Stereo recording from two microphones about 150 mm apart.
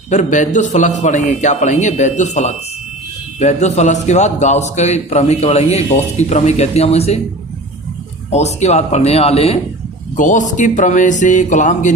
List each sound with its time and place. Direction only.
0.1 s a man's voice: 55° left (ahead or behind)
8.3 s a man's voice: 50° left (ahead or behind)
10.2 s speech: 55° left (ahead or behind)